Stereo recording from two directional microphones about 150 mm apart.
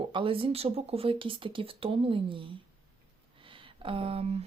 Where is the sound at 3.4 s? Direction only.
35° right (ahead or behind).